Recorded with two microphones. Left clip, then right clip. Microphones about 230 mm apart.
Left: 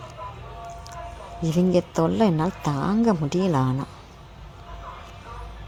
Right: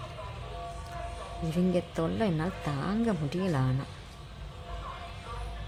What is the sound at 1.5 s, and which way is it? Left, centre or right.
Speech, centre.